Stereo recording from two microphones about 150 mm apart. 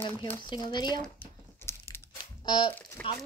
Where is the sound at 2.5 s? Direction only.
30° left (ahead or behind).